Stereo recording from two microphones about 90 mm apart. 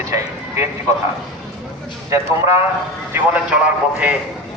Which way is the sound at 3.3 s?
15° right (ahead or behind).